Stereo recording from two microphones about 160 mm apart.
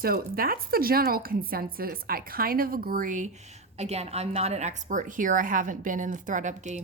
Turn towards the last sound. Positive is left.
turn(degrees=-50)  # may be behind; listen again after turning